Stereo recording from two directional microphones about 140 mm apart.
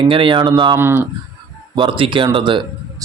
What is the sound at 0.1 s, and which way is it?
Speech, 35° right (ahead or behind).